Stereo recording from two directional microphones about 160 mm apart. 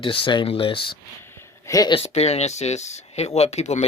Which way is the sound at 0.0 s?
30° left (ahead or behind).